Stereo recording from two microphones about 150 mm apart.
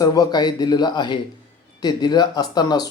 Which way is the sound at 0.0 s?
25° left (ahead or behind).